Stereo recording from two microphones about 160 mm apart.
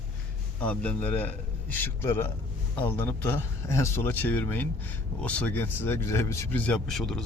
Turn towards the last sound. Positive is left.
turn(degrees=0)  # may be behind; listen again after turning